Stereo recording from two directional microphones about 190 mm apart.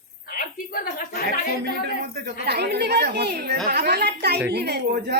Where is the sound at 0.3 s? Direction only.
50° left (ahead or behind).